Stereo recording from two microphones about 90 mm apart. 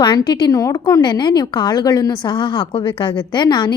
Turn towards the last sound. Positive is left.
turn(degrees=55)  # may be behind; listen again after turning